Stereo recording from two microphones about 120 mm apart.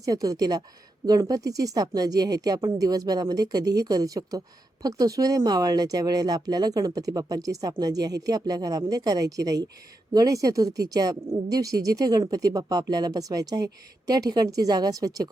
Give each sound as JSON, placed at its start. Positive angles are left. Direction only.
{"t": 0.0, "sound": "a woman's voice", "side_deg": -30}